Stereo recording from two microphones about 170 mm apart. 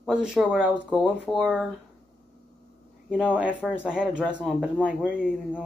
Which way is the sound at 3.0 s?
5° right (ahead or behind).